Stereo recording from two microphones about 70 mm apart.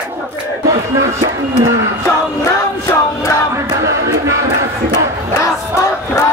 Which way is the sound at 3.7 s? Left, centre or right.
Right.